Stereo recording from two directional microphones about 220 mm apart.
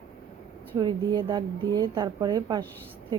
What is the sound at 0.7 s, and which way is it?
A woman's voice, 20° right (ahead or behind).